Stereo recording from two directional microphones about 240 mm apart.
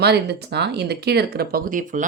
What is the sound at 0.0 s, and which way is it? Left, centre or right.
Speech, right.